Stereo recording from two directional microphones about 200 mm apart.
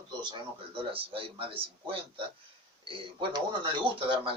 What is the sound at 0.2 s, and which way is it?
A man's voice, 25° right (ahead or behind).